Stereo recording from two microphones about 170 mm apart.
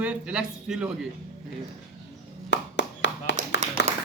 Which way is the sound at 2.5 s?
90° left.